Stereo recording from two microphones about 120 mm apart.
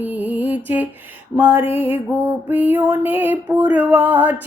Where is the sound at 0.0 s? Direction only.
15° right (ahead or behind).